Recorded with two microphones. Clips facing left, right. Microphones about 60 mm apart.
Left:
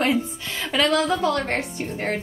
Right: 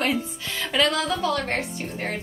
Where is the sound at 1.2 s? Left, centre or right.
Left.